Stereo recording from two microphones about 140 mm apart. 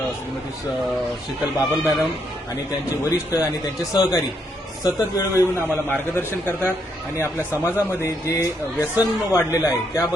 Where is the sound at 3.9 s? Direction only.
25° left (ahead or behind).